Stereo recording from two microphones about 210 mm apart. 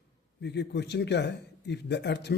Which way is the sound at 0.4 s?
55° left (ahead or behind).